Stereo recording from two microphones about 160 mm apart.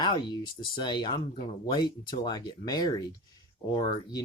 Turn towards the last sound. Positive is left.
turn(degrees=25)  # may be behind; listen again after turning